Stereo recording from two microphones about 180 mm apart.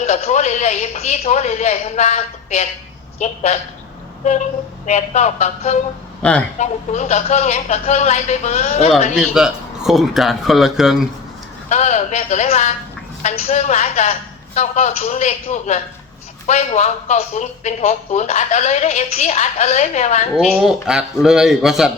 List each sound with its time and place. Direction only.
0.0 s speech: 40° left (ahead or behind)
4.2 s vehicle: 40° left (ahead or behind)
4.9 s speech: 40° left (ahead or behind)
6.2 s a man's voice: 5° left (ahead or behind)
6.6 s speech: 40° left (ahead or behind)
9.1 s speech: centre (ahead or behind)
11.7 s speech: 40° left (ahead or behind)
20.5 s speech: 5° right (ahead or behind)